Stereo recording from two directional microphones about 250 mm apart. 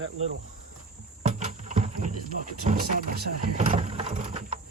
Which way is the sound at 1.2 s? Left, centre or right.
Right.